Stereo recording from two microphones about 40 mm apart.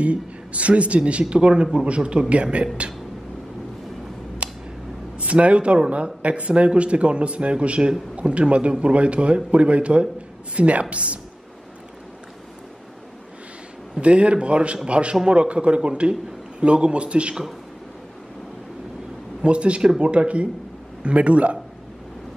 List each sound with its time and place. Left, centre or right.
0.0 s a man's voice: right
4.4 s tick: right
5.1 s a man's voice: right
14.0 s a man's voice: right
19.4 s a man's voice: right